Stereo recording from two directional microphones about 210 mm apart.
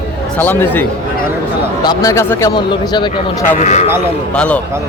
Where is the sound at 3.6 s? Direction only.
35° left (ahead or behind).